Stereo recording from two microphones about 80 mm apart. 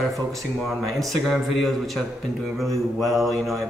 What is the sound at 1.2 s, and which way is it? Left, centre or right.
Speech, centre.